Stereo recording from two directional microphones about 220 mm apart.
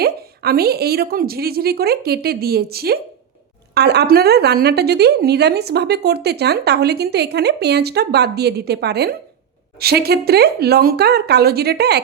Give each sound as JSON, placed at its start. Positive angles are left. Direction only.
{"t": 0.0, "sound": "a woman's voice", "side_deg": -45}